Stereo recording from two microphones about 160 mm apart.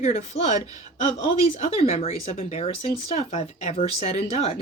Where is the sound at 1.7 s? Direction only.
40° left (ahead or behind).